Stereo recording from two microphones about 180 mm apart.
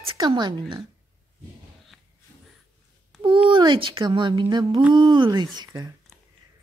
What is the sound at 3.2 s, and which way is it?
Speech, 25° right (ahead or behind).